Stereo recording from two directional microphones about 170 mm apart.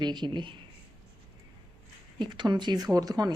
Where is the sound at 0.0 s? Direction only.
25° right (ahead or behind).